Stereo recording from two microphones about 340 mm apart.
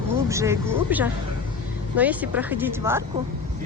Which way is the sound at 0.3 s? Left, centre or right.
Centre.